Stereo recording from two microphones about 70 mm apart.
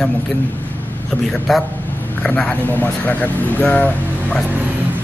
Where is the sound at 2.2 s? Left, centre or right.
Left.